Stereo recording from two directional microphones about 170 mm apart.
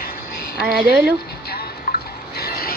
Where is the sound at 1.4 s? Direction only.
65° left (ahead or behind).